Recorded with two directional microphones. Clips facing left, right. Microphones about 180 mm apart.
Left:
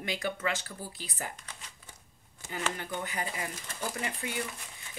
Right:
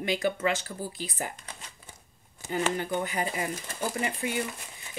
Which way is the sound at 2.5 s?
35° right (ahead or behind).